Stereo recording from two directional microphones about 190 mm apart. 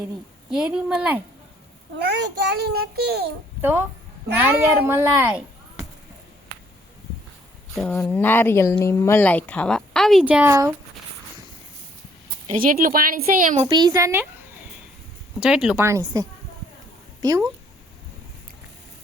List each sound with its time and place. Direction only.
0.5 s speech: 5° right (ahead or behind)
2.0 s a child's voice: 65° right (ahead or behind)
3.6 s speech: 10° right (ahead or behind)
4.9 s speech: 10° right (ahead or behind)
7.8 s speech: 5° left (ahead or behind); by 10.7 s 15° right (ahead or behind)
12.5 s speech: 45° right (ahead or behind)
13.7 s speech: 25° right (ahead or behind)
15.4 s speech: 5° right (ahead or behind)
17.2 s speech: 20° right (ahead or behind)